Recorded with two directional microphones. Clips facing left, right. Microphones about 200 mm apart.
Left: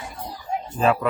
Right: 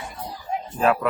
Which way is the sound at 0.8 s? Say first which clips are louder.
Even; 5° right (ahead or behind).